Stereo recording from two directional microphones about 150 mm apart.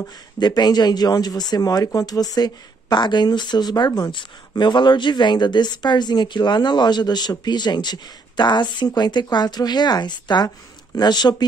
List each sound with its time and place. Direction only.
0.0 s speech: 25° left (ahead or behind)